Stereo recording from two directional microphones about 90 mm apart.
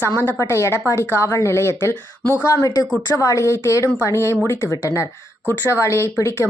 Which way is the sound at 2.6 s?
45° left (ahead or behind).